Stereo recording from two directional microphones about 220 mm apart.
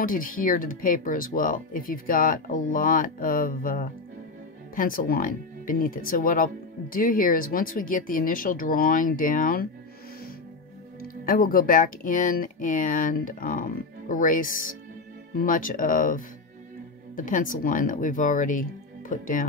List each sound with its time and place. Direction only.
0.0 s speech: 40° left (ahead or behind)
11.0 s speech: 40° left (ahead or behind)